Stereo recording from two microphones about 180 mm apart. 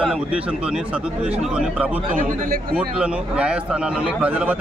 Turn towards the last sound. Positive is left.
turn(degrees=-10)  # may be behind; listen again after turning